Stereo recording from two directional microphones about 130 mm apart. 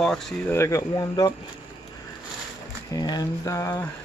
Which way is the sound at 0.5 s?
25° left (ahead or behind).